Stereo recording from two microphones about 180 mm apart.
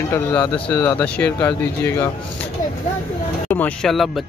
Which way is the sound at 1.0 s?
10° left (ahead or behind).